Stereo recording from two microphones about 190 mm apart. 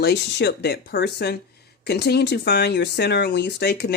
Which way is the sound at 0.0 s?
60° left (ahead or behind).